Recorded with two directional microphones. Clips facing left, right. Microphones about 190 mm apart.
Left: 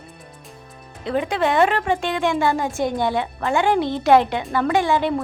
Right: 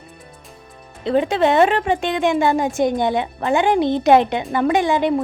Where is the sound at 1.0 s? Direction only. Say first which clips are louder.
Right 4 dB; 25° right (ahead or behind).